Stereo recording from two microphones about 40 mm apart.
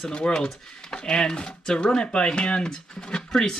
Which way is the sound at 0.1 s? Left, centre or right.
Left.